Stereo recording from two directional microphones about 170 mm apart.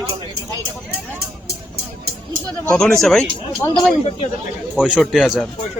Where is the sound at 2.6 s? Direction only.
5° left (ahead or behind).